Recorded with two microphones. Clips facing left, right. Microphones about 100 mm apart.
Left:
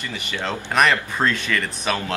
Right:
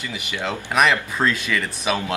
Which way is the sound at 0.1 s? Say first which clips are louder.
Even; 10° right (ahead or behind).